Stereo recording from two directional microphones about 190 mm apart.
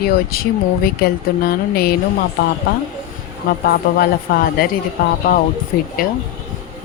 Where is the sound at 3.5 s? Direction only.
45° left (ahead or behind).